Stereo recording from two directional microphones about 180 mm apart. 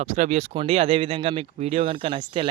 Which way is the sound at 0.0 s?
40° right (ahead or behind).